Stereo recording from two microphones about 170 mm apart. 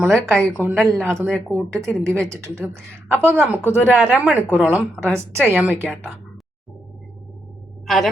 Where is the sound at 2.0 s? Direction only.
15° right (ahead or behind).